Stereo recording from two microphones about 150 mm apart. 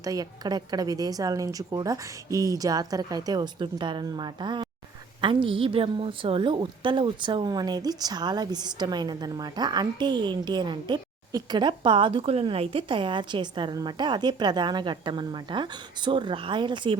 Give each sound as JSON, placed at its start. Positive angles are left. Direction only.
{"t": 0.0, "sound": "a woman's voice", "side_deg": -25}